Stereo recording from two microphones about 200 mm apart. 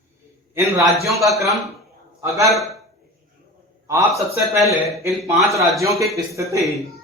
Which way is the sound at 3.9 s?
15° right (ahead or behind).